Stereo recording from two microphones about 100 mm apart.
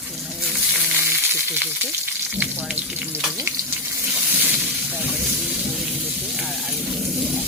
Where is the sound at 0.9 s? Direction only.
20° right (ahead or behind).